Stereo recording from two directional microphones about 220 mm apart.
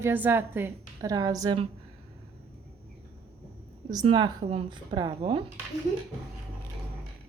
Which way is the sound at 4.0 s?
25° right (ahead or behind).